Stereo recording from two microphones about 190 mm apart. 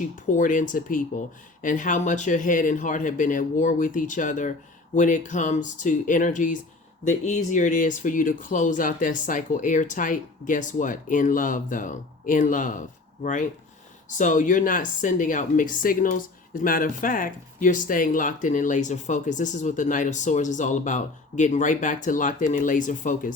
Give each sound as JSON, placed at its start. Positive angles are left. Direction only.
{"t": 0.3, "sound": "speech", "side_deg": 45}